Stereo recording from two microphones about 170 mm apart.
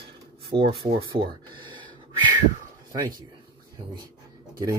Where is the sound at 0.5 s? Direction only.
30° right (ahead or behind).